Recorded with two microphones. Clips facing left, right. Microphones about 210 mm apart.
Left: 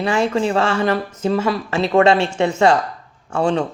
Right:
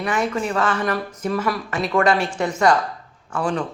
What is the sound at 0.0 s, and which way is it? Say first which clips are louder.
Speech: left 5 dB; 25° left (ahead or behind).